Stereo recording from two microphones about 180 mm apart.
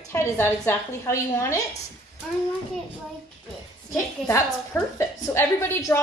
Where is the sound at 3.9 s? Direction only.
15° left (ahead or behind).